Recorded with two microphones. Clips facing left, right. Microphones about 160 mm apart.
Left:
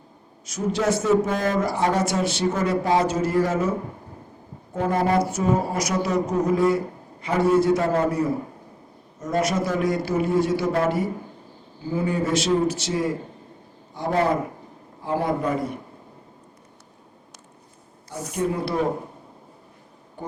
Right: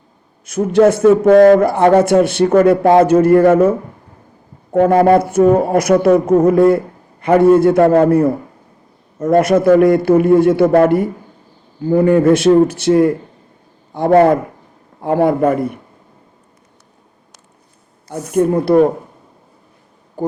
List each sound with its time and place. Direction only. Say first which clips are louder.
0.4 s speech: right 12 dB; 55° right (ahead or behind)
18.1 s speech: right 11 dB; 55° right (ahead or behind)
20.2 s a sound: right 15 dB; 40° right (ahead or behind)